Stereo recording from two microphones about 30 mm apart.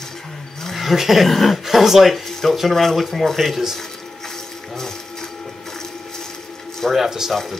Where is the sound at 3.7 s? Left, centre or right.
Centre.